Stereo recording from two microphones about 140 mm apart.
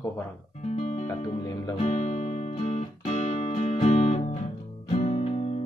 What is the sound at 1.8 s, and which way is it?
Music, 55° left (ahead or behind).